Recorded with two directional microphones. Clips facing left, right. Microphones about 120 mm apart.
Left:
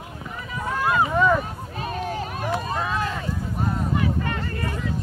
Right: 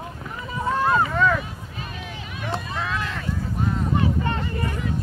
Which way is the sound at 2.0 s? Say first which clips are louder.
Left 7 dB; 45° left (ahead or behind).